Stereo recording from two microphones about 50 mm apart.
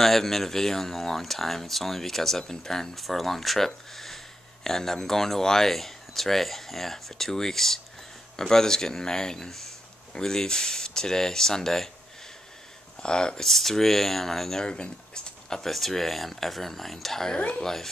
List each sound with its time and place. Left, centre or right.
0.0 s speech: centre
13.0 s speech: centre
13.5 s speech: centre
15.6 s speech: centre